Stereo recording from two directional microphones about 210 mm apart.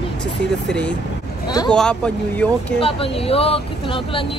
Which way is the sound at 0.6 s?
5° left (ahead or behind).